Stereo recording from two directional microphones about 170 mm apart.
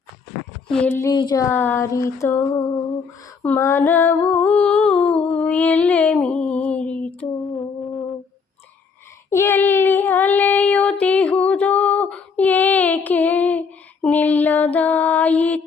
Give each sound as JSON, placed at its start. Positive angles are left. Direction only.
{"t": 0.7, "sound": "speech", "side_deg": 5}
{"t": 6.3, "sound": "a sound", "side_deg": 5}
{"t": 9.3, "sound": "speech", "side_deg": 15}
{"t": 11.4, "sound": "female singing", "side_deg": 10}